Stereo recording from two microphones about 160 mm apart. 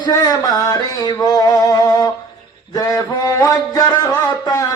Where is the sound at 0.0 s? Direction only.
25° left (ahead or behind).